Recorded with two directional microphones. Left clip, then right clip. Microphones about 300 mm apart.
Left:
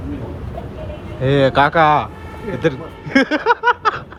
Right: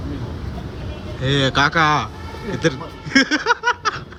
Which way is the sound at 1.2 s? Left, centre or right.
Centre.